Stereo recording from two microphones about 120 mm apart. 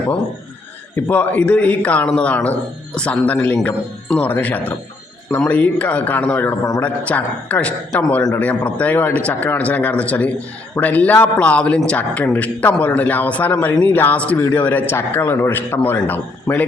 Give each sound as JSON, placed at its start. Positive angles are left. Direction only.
{"t": 0.9, "sound": "speech", "side_deg": 15}